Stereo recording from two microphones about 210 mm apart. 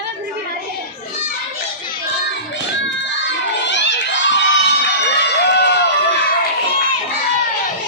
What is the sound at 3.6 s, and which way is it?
Crowd, 60° left (ahead or behind).